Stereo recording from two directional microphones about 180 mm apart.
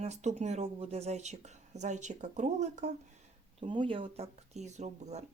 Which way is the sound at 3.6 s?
30° right (ahead or behind).